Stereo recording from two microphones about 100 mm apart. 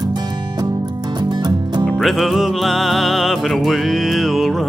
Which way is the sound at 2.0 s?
Centre (ahead or behind).